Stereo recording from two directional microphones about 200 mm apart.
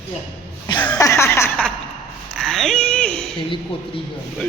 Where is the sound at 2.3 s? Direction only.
Centre (ahead or behind).